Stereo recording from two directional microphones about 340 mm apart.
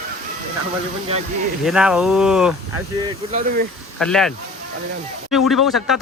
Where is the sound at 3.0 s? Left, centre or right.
Right.